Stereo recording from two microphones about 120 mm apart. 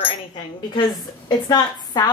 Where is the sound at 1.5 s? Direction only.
35° left (ahead or behind).